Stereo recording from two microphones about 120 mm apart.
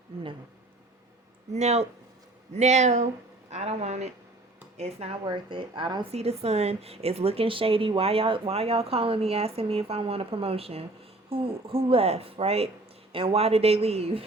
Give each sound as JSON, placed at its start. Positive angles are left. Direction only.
{"t": 1.5, "sound": "a woman's voice", "side_deg": -65}
{"t": 3.5, "sound": "a woman's voice", "side_deg": -65}
{"t": 5.2, "sound": "speech", "side_deg": -40}
{"t": 6.1, "sound": "a woman's voice", "side_deg": -60}